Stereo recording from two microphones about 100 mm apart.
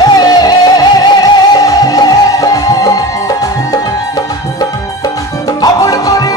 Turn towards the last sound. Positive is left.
turn(degrees=35)  # may be behind; listen again after turning